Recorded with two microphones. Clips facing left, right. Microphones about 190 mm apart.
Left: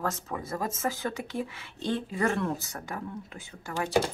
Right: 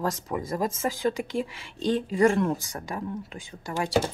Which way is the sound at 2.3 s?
15° right (ahead or behind).